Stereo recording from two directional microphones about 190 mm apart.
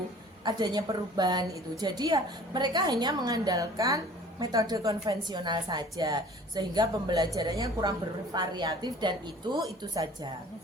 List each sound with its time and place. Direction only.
0.4 s a woman's voice: 20° right (ahead or behind)